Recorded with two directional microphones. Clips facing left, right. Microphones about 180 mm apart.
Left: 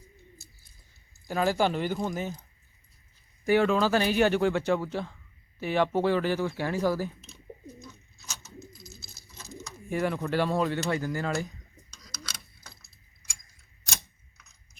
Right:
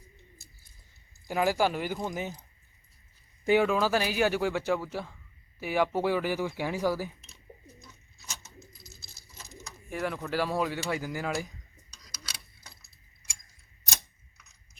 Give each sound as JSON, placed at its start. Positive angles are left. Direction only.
{"t": 1.3, "sound": "speech", "side_deg": -10}
{"t": 3.4, "sound": "speech", "side_deg": -15}
{"t": 9.9, "sound": "speech", "side_deg": 0}
{"t": 11.9, "sound": "a sound", "side_deg": -10}